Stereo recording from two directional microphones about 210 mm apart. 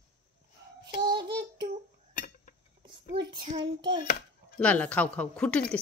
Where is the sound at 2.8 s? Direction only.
20° right (ahead or behind).